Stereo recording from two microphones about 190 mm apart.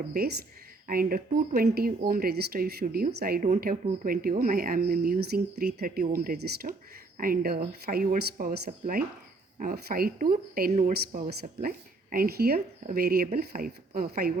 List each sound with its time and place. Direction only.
0.1 s speech: 55° right (ahead or behind)
10.7 s speech: 35° right (ahead or behind)
10.9 s speech: 50° right (ahead or behind)